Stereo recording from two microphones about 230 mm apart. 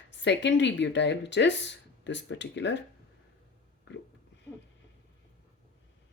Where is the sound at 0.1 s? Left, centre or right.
Left.